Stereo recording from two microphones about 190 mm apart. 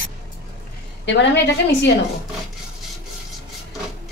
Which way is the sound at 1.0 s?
65° left (ahead or behind).